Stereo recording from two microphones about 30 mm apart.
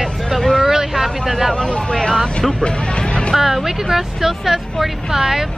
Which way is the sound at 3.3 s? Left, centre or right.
Centre.